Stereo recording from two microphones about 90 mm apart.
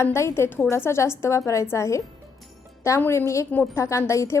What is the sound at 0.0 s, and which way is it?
A woman's voice, 30° left (ahead or behind).